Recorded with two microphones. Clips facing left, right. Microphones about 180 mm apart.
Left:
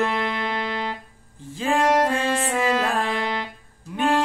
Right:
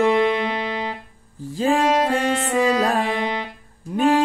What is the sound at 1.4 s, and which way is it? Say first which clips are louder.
Music: right 3 dB; 35° right (ahead or behind).